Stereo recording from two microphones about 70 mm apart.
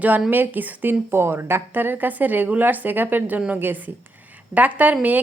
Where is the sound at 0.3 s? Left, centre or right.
Right.